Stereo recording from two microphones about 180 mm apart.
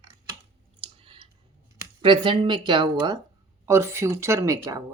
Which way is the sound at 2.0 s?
30° right (ahead or behind).